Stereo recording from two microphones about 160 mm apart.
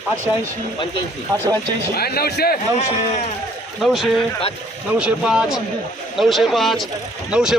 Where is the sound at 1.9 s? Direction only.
75° left (ahead or behind).